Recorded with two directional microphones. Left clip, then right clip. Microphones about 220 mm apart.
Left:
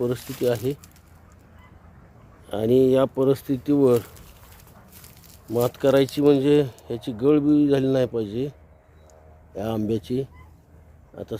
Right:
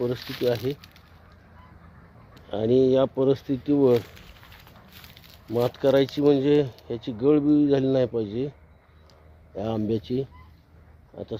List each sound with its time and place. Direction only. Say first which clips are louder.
0.3 s speech: left 2 dB; centre (ahead or behind)
2.5 s speech: left 2 dB; 5° left (ahead or behind)
5.5 s speech: left 2 dB; centre (ahead or behind)
9.6 s speech: left 1 dB; centre (ahead or behind)